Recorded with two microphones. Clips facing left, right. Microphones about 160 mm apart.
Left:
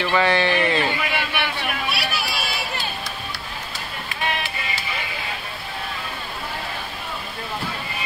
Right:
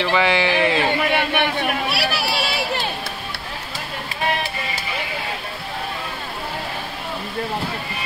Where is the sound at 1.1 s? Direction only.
55° right (ahead or behind).